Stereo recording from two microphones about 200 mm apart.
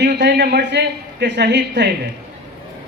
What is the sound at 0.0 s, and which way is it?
A woman's voice, 60° right (ahead or behind).